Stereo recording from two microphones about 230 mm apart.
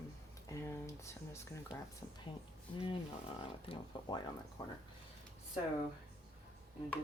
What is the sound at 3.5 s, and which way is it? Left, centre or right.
Speech, left.